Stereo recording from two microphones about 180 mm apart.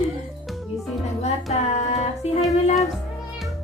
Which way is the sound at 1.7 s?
40° left (ahead or behind).